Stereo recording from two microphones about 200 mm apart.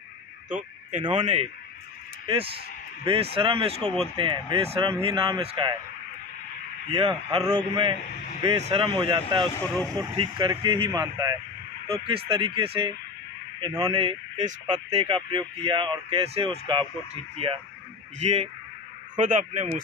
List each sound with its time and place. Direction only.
1.2 s a man's voice: 30° right (ahead or behind)
3.8 s speech: 10° left (ahead or behind)
4.2 s speech: 25° right (ahead or behind)
6.9 s a man's voice: 25° right (ahead or behind)